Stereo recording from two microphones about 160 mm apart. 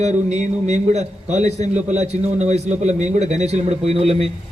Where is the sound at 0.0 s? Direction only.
45° right (ahead or behind).